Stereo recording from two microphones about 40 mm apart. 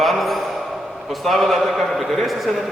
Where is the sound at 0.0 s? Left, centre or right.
Centre.